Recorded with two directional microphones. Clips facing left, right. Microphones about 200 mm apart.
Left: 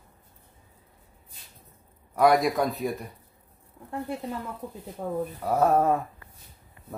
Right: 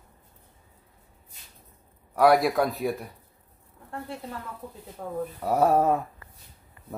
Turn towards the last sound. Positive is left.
turn(degrees=-5)  # may be behind; listen again after turning